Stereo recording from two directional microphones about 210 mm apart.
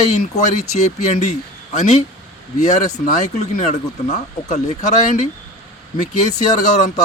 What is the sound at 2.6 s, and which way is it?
Speech, 35° left (ahead or behind).